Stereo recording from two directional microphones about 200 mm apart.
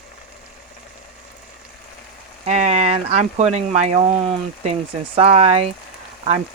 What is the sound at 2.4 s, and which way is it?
Speech, 35° right (ahead or behind).